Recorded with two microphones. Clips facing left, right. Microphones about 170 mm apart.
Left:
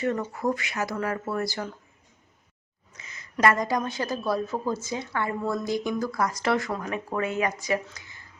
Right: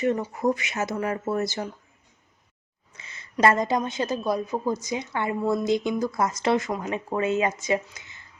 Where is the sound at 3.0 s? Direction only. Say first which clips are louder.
Right 2 dB; 30° right (ahead or behind).